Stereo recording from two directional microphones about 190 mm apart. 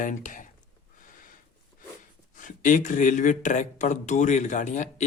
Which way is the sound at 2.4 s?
45° left (ahead or behind).